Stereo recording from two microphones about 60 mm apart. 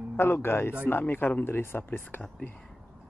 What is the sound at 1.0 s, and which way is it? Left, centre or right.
Speech, left.